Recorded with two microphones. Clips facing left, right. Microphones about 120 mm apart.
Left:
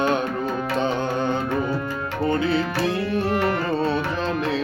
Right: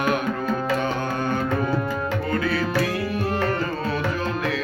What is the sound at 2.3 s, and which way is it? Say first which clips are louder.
Tabla: left 2 dB; 25° left (ahead or behind).